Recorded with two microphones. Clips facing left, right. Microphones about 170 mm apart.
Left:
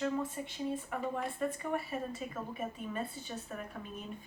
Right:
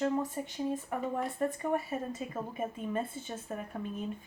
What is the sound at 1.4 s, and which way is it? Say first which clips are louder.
A woman's voice: right 4 dB; 40° right (ahead or behind).